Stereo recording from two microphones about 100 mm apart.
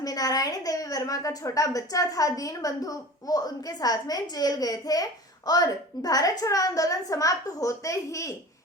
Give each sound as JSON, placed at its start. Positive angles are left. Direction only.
{"t": 0.0, "sound": "a woman's voice", "side_deg": 40}